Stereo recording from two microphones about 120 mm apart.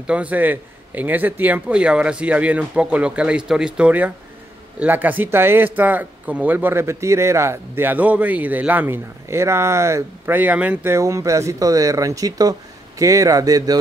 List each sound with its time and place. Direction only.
0.0 s a man's voice: 10° right (ahead or behind); by 13.7 s 30° right (ahead or behind)